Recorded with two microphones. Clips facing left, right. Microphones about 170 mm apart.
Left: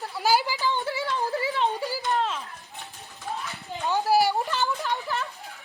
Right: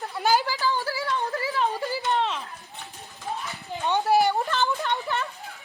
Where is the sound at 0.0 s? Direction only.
Centre (ahead or behind).